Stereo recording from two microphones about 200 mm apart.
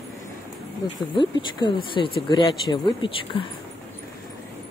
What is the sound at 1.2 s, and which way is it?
Speech, 25° left (ahead or behind).